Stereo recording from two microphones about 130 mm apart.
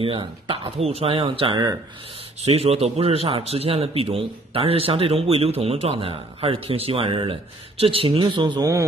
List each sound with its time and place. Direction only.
0.0 s speech: 40° right (ahead or behind)
2.4 s a man's voice: 50° right (ahead or behind); by 8.8 s 30° right (ahead or behind)